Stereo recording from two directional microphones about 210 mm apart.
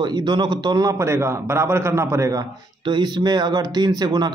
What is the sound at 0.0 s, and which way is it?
A man's voice, 20° right (ahead or behind).